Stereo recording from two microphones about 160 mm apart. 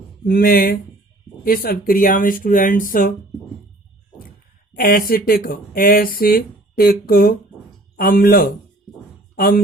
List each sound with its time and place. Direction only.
0.3 s speech: 65° left (ahead or behind)
4.7 s a woman's voice: 60° left (ahead or behind)